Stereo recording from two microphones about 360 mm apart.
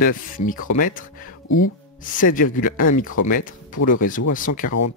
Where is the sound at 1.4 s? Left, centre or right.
Left.